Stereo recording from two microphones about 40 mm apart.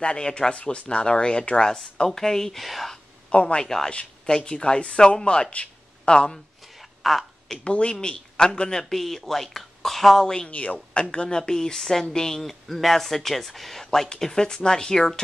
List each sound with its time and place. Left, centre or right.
0.0 s speech: left
2.6 s speech: centre
3.3 s speech: left
3.6 s speech: centre
7.0 s a sound: centre
7.6 s speech: left
8.9 s speech: centre
10.2 s speech: centre
10.5 s speech: left
10.9 s speech: left